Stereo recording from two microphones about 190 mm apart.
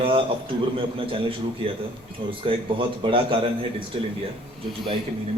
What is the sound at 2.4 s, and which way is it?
A man's voice, 25° right (ahead or behind).